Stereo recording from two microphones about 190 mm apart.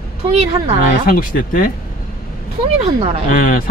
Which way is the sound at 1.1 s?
45° left (ahead or behind).